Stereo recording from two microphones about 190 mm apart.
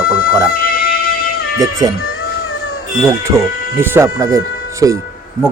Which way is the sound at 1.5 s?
20° right (ahead or behind).